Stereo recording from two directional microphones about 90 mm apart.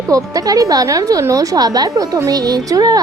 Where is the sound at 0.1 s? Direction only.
40° right (ahead or behind).